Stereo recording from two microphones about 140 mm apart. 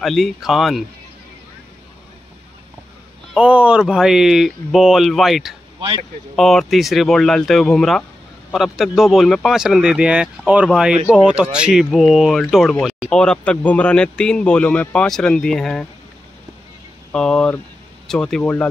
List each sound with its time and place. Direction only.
0.0 s speech: centre (ahead or behind)
3.3 s speech: 5° right (ahead or behind)
5.8 s speech: 40° right (ahead or behind)
6.3 s speech: centre (ahead or behind)
17.1 s speech: 5° left (ahead or behind)